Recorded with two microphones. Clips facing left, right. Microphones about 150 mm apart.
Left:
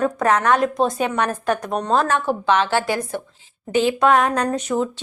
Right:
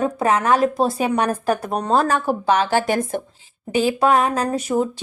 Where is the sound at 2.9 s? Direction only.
50° right (ahead or behind).